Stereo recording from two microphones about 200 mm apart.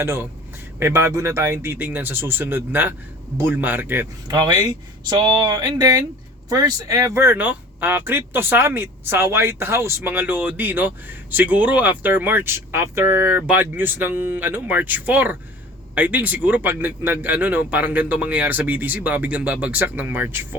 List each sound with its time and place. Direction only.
0.0 s a man's voice: 10° right (ahead or behind)